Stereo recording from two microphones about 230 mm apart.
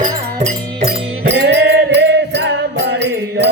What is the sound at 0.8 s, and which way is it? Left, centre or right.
Music, right.